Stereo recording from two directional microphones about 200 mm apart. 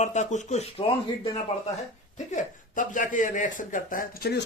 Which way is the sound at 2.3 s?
40° left (ahead or behind).